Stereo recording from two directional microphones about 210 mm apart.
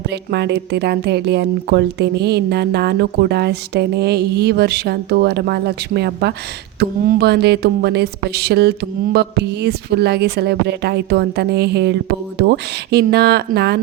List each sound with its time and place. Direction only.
0.1 s speech: 55° right (ahead or behind)